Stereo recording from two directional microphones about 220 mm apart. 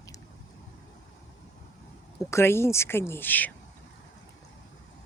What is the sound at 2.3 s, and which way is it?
Speech, 10° left (ahead or behind).